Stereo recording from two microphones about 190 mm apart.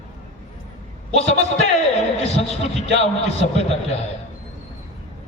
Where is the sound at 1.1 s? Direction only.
35° left (ahead or behind).